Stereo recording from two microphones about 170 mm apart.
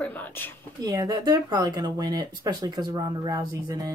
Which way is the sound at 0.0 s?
10° left (ahead or behind).